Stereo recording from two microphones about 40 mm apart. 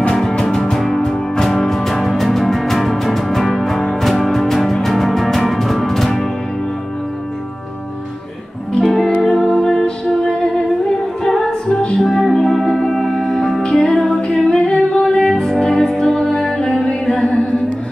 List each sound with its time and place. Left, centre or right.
0.1 s music: centre
0.7 s music: centre
1.0 s music: centre
8.8 s music: centre
11.7 s music: left
12.0 s music: centre; by 15.0 s left
15.0 s music: centre